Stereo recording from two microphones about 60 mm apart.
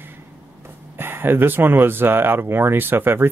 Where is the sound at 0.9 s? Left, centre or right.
Right.